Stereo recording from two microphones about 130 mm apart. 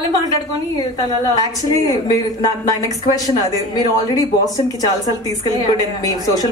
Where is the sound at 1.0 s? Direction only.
30° left (ahead or behind).